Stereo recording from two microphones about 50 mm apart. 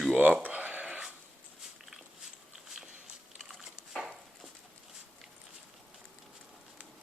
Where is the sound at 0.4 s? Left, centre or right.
Right.